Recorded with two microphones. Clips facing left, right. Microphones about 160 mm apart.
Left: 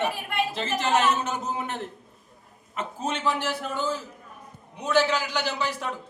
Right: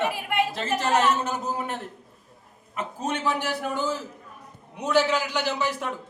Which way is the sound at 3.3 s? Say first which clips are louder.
Right 1 dB; 15° right (ahead or behind).